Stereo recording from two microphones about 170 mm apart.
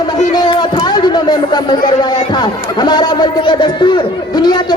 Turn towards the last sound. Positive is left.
turn(degrees=25)  # may be behind; listen again after turning